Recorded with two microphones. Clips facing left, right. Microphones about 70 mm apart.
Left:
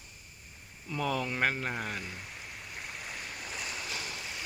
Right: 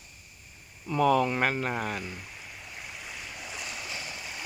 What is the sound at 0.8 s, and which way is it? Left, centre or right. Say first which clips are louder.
Speech: right 9 dB; right.